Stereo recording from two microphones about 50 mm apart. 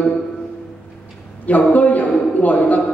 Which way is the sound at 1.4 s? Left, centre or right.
Left.